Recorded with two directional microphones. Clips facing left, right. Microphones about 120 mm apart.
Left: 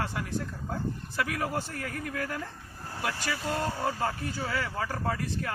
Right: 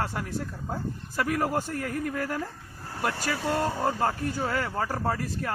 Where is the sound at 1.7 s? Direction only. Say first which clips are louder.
Right 5 dB; centre (ahead or behind).